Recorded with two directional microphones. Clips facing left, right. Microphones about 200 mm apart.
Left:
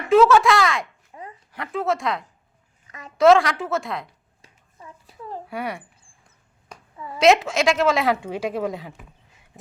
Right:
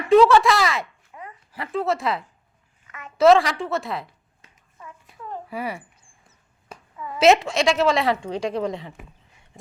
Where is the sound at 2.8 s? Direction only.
35° left (ahead or behind).